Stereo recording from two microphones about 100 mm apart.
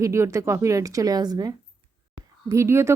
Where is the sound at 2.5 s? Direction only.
25° right (ahead or behind).